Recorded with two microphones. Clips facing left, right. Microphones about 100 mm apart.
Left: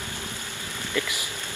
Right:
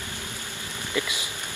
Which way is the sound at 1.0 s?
20° right (ahead or behind).